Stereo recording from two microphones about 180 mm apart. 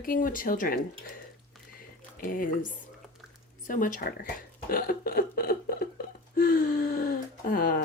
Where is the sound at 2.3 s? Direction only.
50° left (ahead or behind).